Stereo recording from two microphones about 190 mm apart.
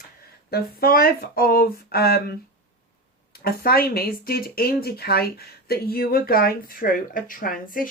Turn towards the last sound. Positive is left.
turn(degrees=45)  # may be behind; listen again after turning